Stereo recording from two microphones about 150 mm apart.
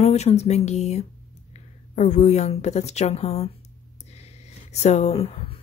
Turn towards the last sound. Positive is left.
turn(degrees=40)  # may be behind; listen again after turning